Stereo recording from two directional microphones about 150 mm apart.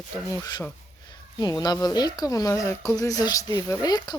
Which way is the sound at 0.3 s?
25° left (ahead or behind).